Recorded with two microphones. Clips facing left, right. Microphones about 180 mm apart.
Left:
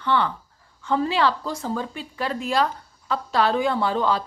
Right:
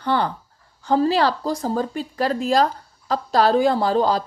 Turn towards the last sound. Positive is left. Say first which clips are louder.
# right 4 dB
turn(degrees=-35)  # may be behind; listen again after turning